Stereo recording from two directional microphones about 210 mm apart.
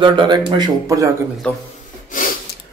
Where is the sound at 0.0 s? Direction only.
20° right (ahead or behind).